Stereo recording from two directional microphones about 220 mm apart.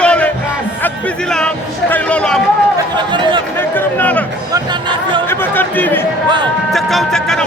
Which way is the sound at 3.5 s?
10° left (ahead or behind).